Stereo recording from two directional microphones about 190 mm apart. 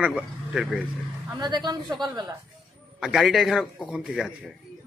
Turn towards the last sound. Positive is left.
turn(degrees=-5)  # may be behind; listen again after turning